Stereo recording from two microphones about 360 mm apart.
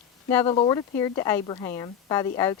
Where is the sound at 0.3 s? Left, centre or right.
Centre.